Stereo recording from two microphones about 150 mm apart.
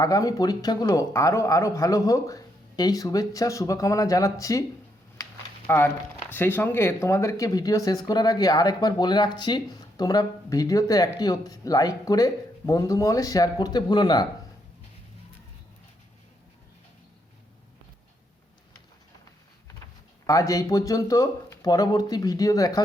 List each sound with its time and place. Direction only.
0.0 s a man's voice: 25° left (ahead or behind)
5.6 s a man's voice: 15° left (ahead or behind)
20.2 s a man's voice: 20° left (ahead or behind)